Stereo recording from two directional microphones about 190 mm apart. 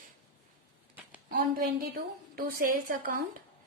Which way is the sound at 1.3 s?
50° right (ahead or behind).